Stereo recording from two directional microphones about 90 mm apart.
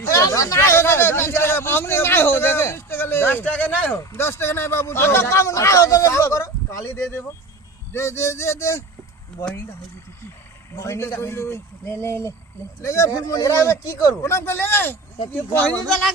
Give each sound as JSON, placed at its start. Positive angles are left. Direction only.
{"t": 0.0, "sound": "a man's voice", "side_deg": 35}
{"t": 10.8, "sound": "a man's voice", "side_deg": 30}
{"t": 15.6, "sound": "speech", "side_deg": 5}